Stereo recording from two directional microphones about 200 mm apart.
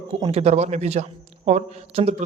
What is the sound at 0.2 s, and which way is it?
A man's voice, 30° right (ahead or behind).